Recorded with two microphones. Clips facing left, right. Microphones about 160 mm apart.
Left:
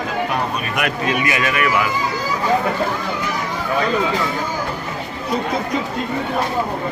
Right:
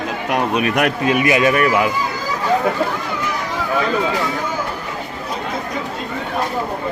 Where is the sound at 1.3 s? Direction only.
25° right (ahead or behind).